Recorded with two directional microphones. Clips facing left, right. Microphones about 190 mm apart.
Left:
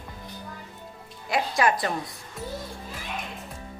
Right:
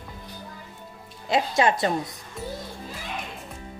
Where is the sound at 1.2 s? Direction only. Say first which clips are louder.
Right 2 dB; 25° right (ahead or behind).